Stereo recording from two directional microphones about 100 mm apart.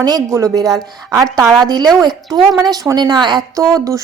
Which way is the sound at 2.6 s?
40° right (ahead or behind).